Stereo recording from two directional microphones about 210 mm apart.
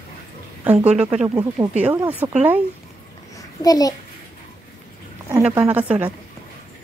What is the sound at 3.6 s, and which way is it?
Speech, 15° left (ahead or behind).